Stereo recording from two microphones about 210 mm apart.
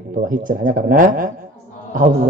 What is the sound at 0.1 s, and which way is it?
A man's voice, 40° right (ahead or behind).